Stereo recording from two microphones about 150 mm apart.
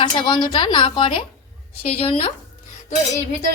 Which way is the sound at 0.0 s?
30° left (ahead or behind).